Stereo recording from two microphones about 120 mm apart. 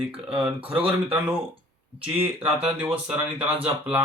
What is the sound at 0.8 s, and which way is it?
Speech, 50° right (ahead or behind).